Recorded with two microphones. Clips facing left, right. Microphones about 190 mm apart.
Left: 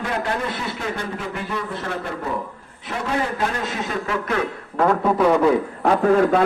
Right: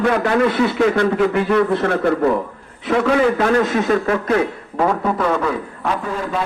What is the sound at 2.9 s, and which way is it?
A man's voice, 90° right.